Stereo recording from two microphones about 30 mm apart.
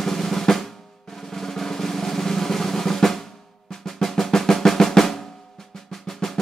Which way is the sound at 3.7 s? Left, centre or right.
Centre.